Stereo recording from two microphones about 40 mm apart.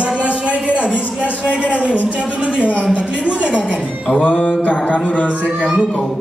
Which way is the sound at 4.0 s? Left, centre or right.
Left.